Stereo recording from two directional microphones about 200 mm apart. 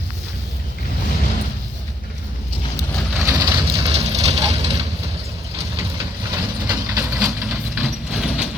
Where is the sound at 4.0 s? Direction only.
35° right (ahead or behind).